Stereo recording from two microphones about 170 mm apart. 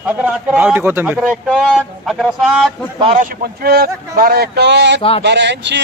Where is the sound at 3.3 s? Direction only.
65° right (ahead or behind); by 5.0 s 90° right.